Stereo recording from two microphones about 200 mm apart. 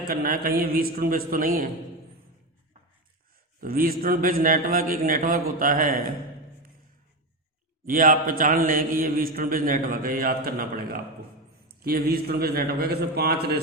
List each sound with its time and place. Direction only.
0.1 s a man's voice: 45° right (ahead or behind)
3.6 s a man's voice: 45° right (ahead or behind)
7.9 s a man's voice: 45° right (ahead or behind)